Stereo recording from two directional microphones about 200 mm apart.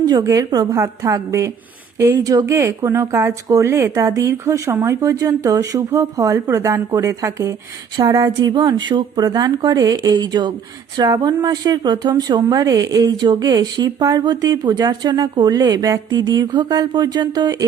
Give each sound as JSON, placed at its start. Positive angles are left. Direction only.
{"t": 0.0, "sound": "a woman's voice", "side_deg": -20}